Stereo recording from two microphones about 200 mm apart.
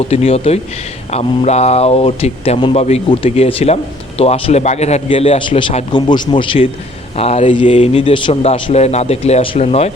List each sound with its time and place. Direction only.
0.1 s a man's voice: 30° left (ahead or behind)